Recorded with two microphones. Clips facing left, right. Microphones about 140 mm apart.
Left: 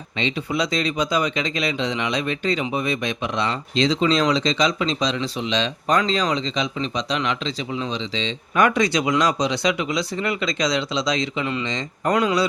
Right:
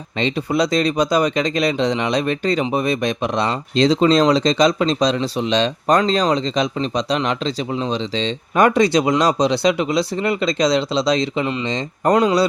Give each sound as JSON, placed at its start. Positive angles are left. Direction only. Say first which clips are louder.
{"t": 0.2, "sound": "speech", "louder": "right 5 dB", "side_deg": -40}